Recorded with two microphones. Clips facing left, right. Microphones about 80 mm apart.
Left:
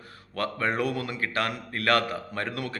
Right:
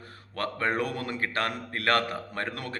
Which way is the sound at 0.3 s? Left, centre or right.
Right.